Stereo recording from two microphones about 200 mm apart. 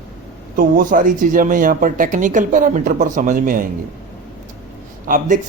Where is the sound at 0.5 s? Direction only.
40° right (ahead or behind).